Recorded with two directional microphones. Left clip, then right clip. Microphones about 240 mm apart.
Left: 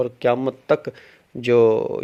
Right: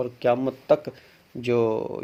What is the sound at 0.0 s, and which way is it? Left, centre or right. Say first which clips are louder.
Speech: left 3 dB; left.